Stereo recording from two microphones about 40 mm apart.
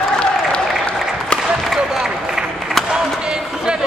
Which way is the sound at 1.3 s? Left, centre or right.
Left.